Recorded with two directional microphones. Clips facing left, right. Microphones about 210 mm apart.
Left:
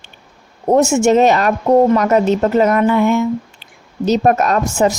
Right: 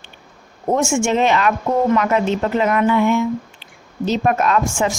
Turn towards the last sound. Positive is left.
turn(degrees=40)  # may be behind; listen again after turning